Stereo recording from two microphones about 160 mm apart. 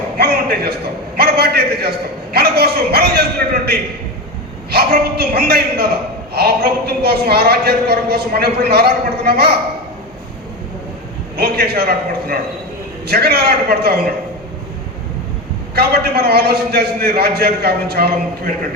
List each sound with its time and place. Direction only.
0.2 s a man's voice: 75° right (ahead or behind)
11.3 s a man's voice: 80° right
15.7 s a man's voice: 80° right